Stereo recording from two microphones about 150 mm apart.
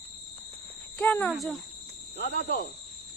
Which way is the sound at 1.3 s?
Centre (ahead or behind).